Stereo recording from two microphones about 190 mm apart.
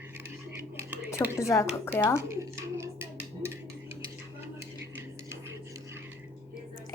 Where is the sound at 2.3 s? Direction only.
15° right (ahead or behind).